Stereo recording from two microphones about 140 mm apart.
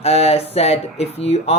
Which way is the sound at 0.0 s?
45° left (ahead or behind).